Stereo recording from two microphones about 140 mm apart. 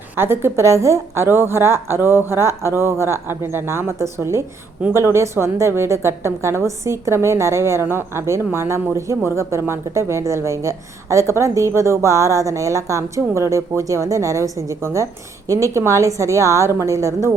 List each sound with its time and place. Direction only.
0.2 s a woman's voice: 15° right (ahead or behind)